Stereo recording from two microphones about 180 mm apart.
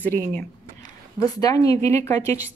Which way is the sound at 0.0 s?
10° left (ahead or behind).